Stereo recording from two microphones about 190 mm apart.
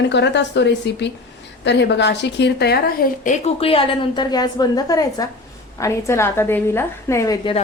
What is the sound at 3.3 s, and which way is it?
A woman's voice, 35° left (ahead or behind).